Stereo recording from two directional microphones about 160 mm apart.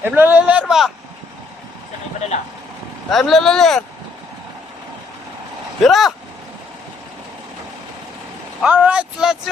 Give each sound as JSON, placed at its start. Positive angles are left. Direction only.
{"t": 0.0, "sound": "speech", "side_deg": -10}
{"t": 3.1, "sound": "speech", "side_deg": 0}
{"t": 5.8, "sound": "speech", "side_deg": 0}
{"t": 8.6, "sound": "speech", "side_deg": -10}